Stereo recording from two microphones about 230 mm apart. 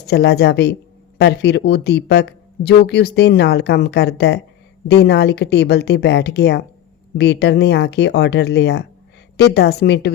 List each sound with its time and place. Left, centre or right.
0.0 s speech: left